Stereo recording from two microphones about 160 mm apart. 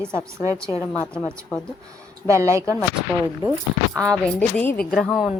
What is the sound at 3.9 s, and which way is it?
A woman's voice, 5° left (ahead or behind).